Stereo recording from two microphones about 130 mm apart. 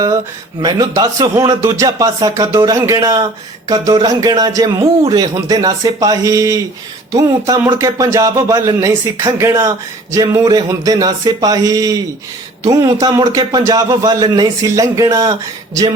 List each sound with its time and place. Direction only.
0.6 s speech: 30° right (ahead or behind)